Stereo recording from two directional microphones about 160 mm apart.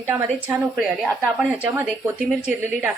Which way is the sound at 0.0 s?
15° right (ahead or behind).